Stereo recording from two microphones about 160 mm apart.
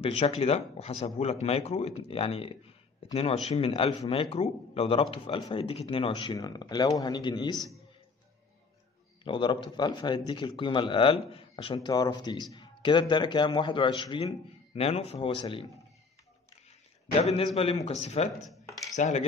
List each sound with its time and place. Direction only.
0.0 s a man's voice: 40° left (ahead or behind)
3.0 s a sound: 35° left (ahead or behind)
3.4 s a man's voice: 35° left (ahead or behind)
9.2 s a man's voice: 30° left (ahead or behind)
17.2 s a man's voice: 40° left (ahead or behind)